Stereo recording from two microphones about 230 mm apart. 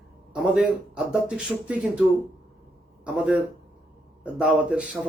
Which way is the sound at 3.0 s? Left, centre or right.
Centre.